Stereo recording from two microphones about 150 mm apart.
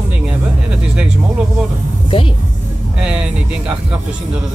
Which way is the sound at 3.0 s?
5° right (ahead or behind).